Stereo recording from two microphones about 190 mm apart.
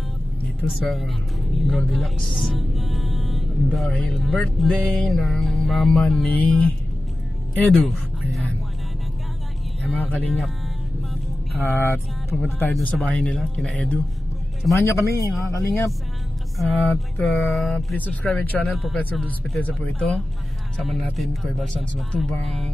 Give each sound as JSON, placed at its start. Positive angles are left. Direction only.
{"t": 0.6, "sound": "speech", "side_deg": 0}
{"t": 9.8, "sound": "speech", "side_deg": 5}
{"t": 11.6, "sound": "speech", "side_deg": 15}
{"t": 12.7, "sound": "speech", "side_deg": 0}
{"t": 14.8, "sound": "speech", "side_deg": 15}
{"t": 16.5, "sound": "speech", "side_deg": 0}